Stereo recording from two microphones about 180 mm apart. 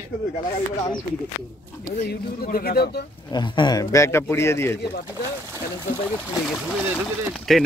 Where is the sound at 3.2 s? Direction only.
25° left (ahead or behind).